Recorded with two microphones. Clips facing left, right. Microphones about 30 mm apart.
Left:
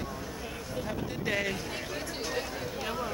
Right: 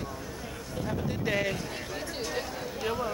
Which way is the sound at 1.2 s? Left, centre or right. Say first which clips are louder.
Right 1 dB; centre.